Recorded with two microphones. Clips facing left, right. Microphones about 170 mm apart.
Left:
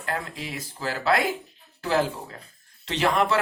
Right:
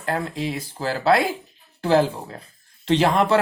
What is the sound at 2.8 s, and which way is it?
Speech, 30° right (ahead or behind).